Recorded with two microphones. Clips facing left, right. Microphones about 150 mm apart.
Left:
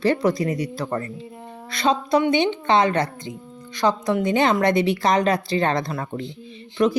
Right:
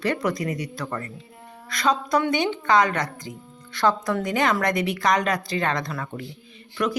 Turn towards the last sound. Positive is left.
turn(degrees=25)  # may be behind; listen again after turning